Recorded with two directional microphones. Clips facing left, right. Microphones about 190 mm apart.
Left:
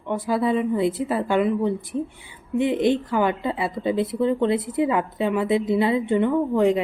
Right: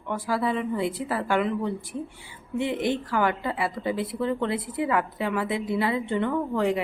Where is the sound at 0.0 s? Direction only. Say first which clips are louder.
Left 4 dB; 20° left (ahead or behind).